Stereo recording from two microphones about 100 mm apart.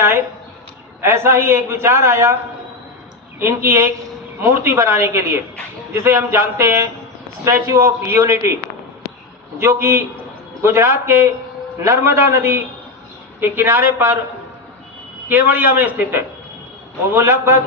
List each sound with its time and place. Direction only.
1.0 s a man's voice: 25° right (ahead or behind)
3.3 s a man's voice: 25° right (ahead or behind)
9.6 s a man's voice: 25° right (ahead or behind)
15.2 s a man's voice: 15° right (ahead or behind)